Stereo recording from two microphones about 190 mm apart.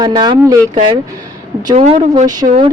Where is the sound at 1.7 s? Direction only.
35° right (ahead or behind).